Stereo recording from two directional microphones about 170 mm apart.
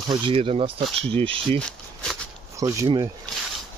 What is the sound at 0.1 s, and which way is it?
Speech, 30° right (ahead or behind).